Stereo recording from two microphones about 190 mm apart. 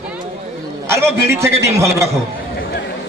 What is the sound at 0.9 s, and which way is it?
A man's voice, 15° right (ahead or behind).